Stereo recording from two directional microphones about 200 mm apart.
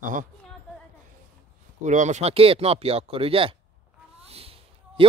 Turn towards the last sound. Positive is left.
turn(degrees=-30)  # may be behind; listen again after turning